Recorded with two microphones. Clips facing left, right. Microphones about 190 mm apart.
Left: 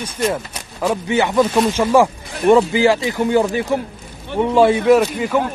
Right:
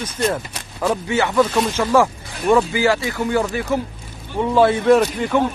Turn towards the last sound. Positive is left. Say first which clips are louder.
# left 1 dB
turn(degrees=5)  # may be behind; listen again after turning